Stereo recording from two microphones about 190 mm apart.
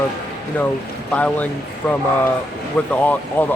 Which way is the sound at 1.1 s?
5° left (ahead or behind).